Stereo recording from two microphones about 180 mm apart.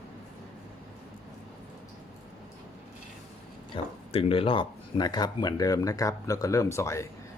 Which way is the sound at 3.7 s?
30° left (ahead or behind).